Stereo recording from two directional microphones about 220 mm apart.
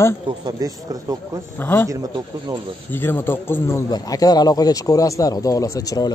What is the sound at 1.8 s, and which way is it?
Speech, 15° right (ahead or behind).